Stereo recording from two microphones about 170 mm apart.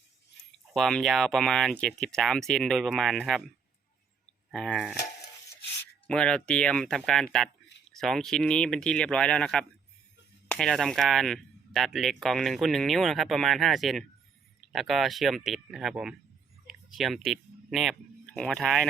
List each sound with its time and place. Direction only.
0.7 s speech: centre (ahead or behind)
4.5 s speech: centre (ahead or behind)
6.1 s speech: 5° left (ahead or behind)
16.6 s a sound: centre (ahead or behind)
18.3 s speech: 5° left (ahead or behind)